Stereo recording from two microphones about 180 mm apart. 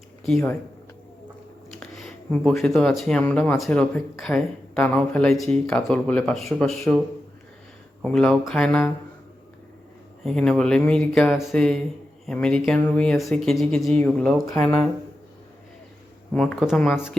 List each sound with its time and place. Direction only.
0.3 s speech: centre (ahead or behind)
1.7 s speech: centre (ahead or behind)
8.0 s speech: 5° left (ahead or behind)
10.2 s speech: 5° left (ahead or behind)
14.4 s speech: 15° left (ahead or behind)
16.3 s speech: 5° left (ahead or behind)